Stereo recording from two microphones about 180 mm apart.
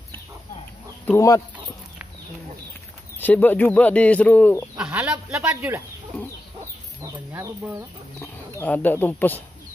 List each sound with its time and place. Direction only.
1.0 s speech: 15° left (ahead or behind)
3.2 s speech: 10° left (ahead or behind)
4.7 s speech: 5° right (ahead or behind)
7.0 s speech: 15° right (ahead or behind)
8.2 s speech: 10° left (ahead or behind)